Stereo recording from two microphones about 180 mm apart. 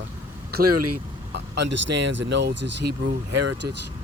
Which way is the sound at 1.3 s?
80° right.